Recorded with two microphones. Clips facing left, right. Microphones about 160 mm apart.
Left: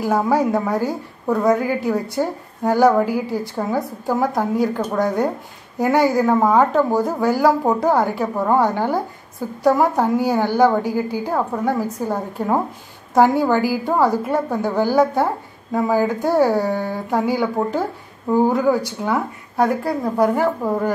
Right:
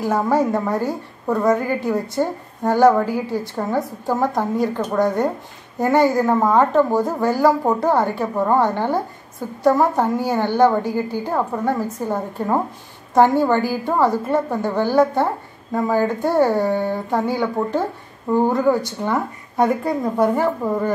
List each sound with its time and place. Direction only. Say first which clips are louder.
0.0 s a woman's voice: left 1 dB; 10° left (ahead or behind)